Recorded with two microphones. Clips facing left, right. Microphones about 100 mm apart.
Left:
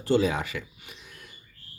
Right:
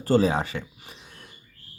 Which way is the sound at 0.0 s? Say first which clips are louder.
Right 3 dB; 35° right (ahead or behind).